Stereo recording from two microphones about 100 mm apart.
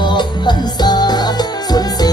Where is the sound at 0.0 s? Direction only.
50° left (ahead or behind).